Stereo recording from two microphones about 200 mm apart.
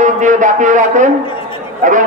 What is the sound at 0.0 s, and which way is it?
A man's voice, 40° right (ahead or behind).